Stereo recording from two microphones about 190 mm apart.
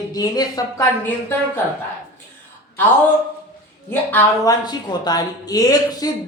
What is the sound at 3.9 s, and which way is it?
Speech, 10° left (ahead or behind).